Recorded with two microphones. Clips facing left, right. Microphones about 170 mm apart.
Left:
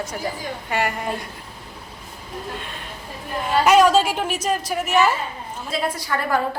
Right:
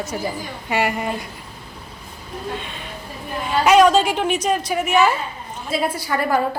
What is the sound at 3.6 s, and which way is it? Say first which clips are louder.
Speech: right 2 dB; 5° left (ahead or behind).